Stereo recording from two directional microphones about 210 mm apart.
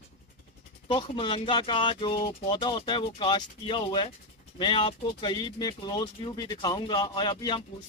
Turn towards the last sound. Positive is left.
turn(degrees=20)  # may be behind; listen again after turning